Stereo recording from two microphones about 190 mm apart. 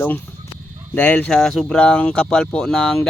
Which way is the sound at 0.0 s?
10° left (ahead or behind).